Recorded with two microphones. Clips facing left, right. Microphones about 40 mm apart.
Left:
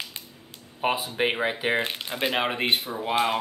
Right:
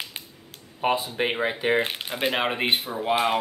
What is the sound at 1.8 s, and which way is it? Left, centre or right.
Speech, centre.